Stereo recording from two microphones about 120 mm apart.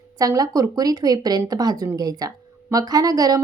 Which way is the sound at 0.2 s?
30° right (ahead or behind).